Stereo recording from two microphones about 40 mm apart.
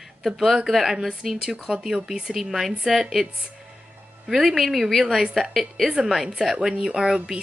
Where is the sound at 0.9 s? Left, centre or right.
Centre.